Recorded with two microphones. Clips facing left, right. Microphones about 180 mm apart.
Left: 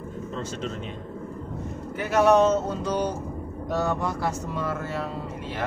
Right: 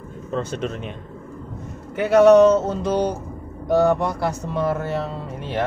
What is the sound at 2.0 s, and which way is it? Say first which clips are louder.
Speech: right 7 dB; 65° right (ahead or behind).